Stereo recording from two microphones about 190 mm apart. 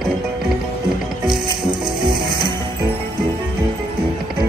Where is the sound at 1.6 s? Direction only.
25° right (ahead or behind).